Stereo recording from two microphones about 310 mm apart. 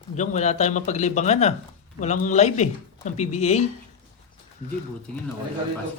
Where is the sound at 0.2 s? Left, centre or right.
Left.